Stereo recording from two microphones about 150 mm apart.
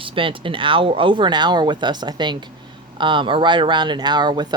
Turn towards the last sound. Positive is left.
turn(degrees=-30)  # may be behind; listen again after turning